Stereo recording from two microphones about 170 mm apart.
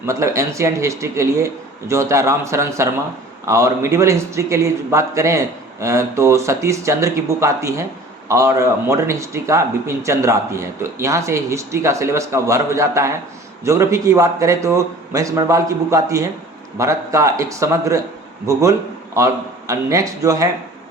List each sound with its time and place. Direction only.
0.0 s a man's voice: 20° right (ahead or behind)